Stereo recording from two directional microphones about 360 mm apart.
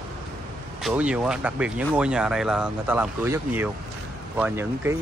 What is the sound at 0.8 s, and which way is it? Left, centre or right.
Speech, centre.